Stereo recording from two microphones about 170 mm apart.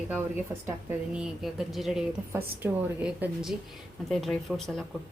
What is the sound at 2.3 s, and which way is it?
A woman's voice, 10° right (ahead or behind).